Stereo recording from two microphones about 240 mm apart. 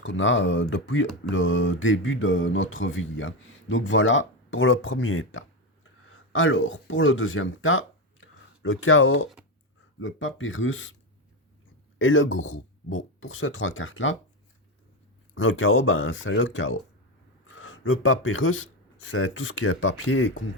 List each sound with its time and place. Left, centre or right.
0.0 s speech: left
11.9 s speech: left
15.4 s speech: left